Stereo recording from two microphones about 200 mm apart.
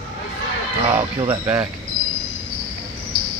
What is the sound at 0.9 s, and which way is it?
Speech, 10° right (ahead or behind).